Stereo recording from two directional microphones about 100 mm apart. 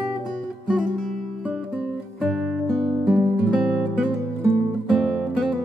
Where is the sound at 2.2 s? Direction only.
Centre (ahead or behind).